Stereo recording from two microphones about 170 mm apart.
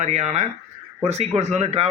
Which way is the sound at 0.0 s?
40° right (ahead or behind).